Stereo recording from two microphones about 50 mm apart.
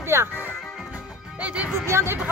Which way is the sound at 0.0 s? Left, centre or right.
Right.